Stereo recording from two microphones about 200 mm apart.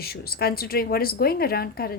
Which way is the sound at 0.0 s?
50° left (ahead or behind).